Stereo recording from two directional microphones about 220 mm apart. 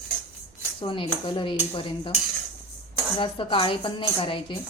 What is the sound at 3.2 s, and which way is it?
Speech, 20° left (ahead or behind).